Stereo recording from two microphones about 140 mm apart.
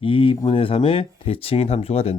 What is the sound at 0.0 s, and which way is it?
Speech, 40° left (ahead or behind).